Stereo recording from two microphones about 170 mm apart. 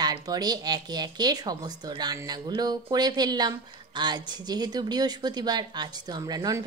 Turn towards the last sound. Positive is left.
turn(degrees=-20)  # may be behind; listen again after turning